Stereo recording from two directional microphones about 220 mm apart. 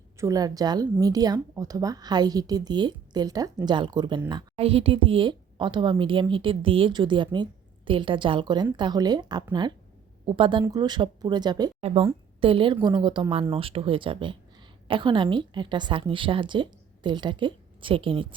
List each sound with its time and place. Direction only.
0.2 s a woman's voice: 15° right (ahead or behind)